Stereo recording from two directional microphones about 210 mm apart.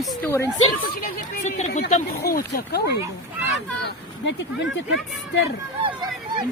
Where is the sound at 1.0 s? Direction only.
40° left (ahead or behind).